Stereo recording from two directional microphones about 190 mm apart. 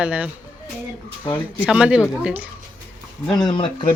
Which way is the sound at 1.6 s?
5° right (ahead or behind).